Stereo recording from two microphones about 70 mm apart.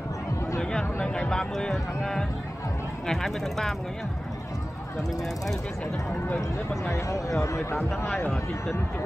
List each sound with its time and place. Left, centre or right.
0.6 s a sound: centre
1.0 s speech: centre
6.0 s speech: left